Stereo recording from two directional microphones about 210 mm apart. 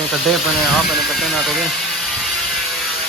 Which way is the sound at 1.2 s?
Centre (ahead or behind).